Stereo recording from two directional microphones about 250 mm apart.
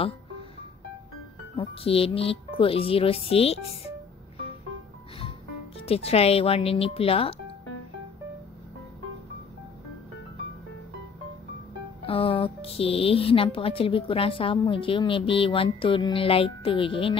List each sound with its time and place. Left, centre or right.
1.6 s speech: left
5.8 s speech: left
12.1 s speech: left